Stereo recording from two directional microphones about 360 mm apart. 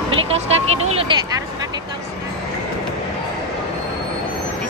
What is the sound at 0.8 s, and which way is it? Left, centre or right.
Speech, centre.